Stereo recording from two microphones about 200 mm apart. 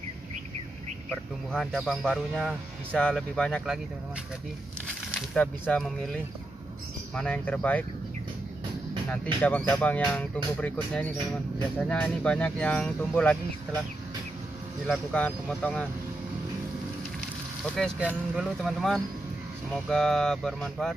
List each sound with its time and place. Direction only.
1.5 s speech: centre (ahead or behind)
4.8 s speech: 5° left (ahead or behind)
9.1 s speech: 5° left (ahead or behind)
14.9 s speech: 5° left (ahead or behind)
17.7 s speech: centre (ahead or behind)